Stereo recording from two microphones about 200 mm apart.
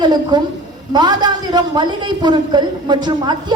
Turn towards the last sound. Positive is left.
turn(degrees=-20)  # may be behind; listen again after turning